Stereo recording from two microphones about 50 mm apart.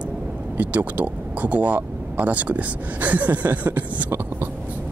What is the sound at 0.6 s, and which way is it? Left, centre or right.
Speech, right.